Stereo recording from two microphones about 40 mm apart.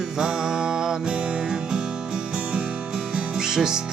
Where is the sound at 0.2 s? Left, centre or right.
Centre.